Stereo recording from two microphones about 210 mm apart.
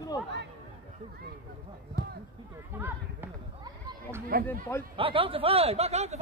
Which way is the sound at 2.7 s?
10° right (ahead or behind).